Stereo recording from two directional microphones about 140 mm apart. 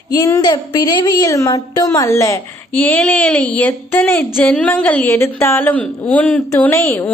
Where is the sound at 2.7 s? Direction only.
10° left (ahead or behind).